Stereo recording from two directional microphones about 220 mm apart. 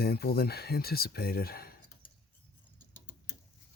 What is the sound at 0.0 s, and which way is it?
Speech, 45° left (ahead or behind).